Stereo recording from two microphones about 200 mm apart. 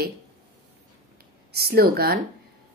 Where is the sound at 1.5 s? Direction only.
50° right (ahead or behind).